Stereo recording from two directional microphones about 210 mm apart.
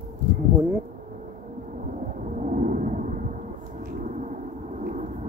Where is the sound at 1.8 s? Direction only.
40° right (ahead or behind).